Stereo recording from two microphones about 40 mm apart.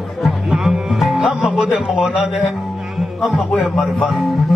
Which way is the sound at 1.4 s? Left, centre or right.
Right.